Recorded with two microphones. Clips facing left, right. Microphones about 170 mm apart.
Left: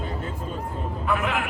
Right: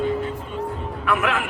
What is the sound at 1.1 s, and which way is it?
Speech, 90° right.